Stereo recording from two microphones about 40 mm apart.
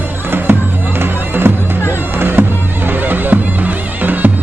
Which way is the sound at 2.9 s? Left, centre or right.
Right.